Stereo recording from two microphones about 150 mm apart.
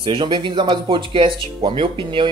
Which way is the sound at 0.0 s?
35° right (ahead or behind).